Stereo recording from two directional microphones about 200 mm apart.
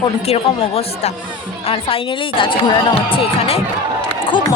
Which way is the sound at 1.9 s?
25° left (ahead or behind).